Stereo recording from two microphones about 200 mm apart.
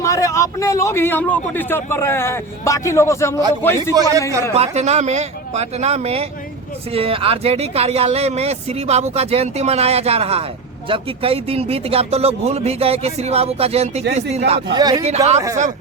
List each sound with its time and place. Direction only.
0.0 s a man's voice: 15° left (ahead or behind)
3.9 s a man's voice: 20° right (ahead or behind)
4.5 s speech: 30° right (ahead or behind)
14.7 s a man's voice: 20° right (ahead or behind)
15.0 s speech: 35° right (ahead or behind)